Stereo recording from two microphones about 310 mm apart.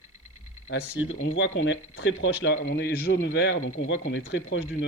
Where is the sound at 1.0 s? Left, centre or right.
Left.